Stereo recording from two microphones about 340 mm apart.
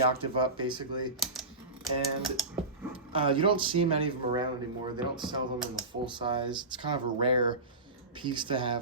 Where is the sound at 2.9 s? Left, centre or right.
Centre.